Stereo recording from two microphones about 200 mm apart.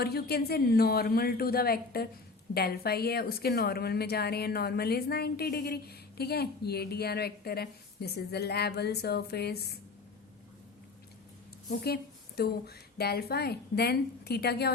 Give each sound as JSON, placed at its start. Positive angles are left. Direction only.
{"t": 0.0, "sound": "a woman's voice", "side_deg": 50}
{"t": 11.7, "sound": "a woman's voice", "side_deg": 50}